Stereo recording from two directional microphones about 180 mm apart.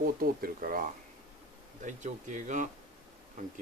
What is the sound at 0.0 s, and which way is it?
Speech, 55° right (ahead or behind).